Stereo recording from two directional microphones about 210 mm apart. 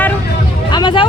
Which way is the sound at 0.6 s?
20° left (ahead or behind).